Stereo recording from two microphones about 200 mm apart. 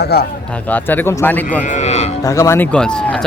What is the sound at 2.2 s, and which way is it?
Speech, 15° left (ahead or behind).